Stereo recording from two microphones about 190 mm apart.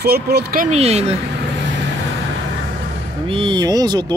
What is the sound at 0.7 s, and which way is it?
Speech, 35° right (ahead or behind).